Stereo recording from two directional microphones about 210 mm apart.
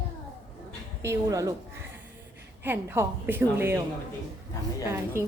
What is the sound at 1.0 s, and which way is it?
A woman's voice, 15° right (ahead or behind).